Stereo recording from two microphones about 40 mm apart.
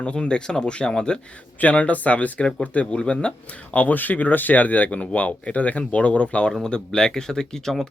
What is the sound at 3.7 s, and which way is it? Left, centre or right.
Speech, left.